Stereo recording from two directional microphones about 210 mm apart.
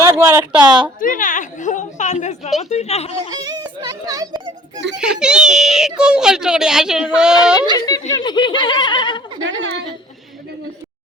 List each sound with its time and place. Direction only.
0.2 s speech: 10° right (ahead or behind)
0.9 s a woman's voice: 40° left (ahead or behind)
3.2 s a child's voice: 20° right (ahead or behind)
4.9 s speech: 5° right (ahead or behind)
7.8 s snicker: 20° left (ahead or behind)
9.4 s a woman's voice: 65° right (ahead or behind)